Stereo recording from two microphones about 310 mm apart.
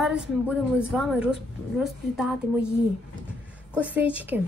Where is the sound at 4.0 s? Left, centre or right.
Centre.